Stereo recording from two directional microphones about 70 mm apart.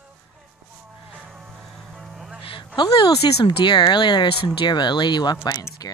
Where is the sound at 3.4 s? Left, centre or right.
Left.